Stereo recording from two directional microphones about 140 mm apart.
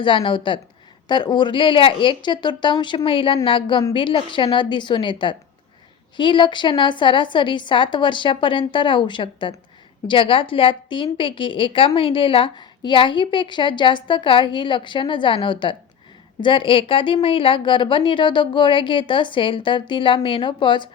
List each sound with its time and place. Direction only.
0.0 s a woman's voice: 35° left (ahead or behind)